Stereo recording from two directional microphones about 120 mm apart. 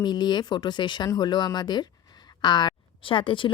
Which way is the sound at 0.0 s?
35° left (ahead or behind).